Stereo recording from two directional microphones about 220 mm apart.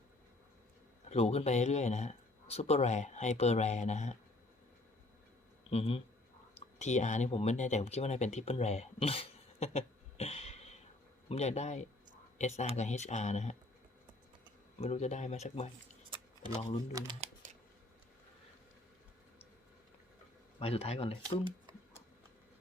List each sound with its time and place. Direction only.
1.1 s speech: 30° left (ahead or behind)
5.7 s speech: 25° left (ahead or behind)
14.8 s speech: 30° left (ahead or behind)
16.9 s speech: 20° right (ahead or behind)
17.4 s scissors: 35° right (ahead or behind)
20.6 s speech: 25° left (ahead or behind)